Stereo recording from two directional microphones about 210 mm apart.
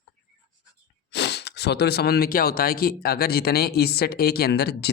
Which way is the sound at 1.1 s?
55° left (ahead or behind).